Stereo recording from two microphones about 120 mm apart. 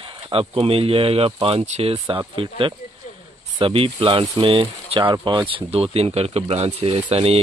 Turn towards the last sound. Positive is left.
turn(degrees=-55)  # may be behind; listen again after turning